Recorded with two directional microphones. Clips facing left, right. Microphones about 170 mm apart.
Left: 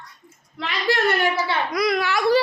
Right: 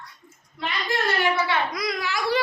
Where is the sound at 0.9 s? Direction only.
90° left.